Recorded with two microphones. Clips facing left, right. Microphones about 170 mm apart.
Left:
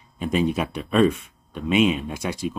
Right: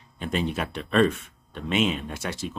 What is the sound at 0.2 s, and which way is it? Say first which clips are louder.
Speech: left 5 dB; 10° left (ahead or behind).